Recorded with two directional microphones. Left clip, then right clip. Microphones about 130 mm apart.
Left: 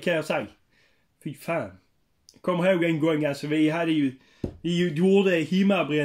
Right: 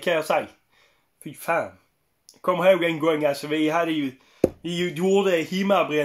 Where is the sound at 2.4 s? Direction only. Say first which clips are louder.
Right 4 dB; 15° left (ahead or behind).